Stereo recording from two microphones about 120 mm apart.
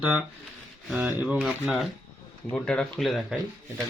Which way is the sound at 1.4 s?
Centre (ahead or behind).